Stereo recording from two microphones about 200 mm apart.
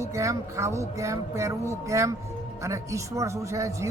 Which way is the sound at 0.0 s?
15° right (ahead or behind).